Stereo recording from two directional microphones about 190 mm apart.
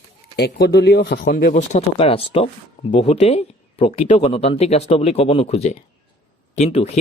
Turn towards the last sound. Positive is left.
turn(degrees=35)  # may be behind; listen again after turning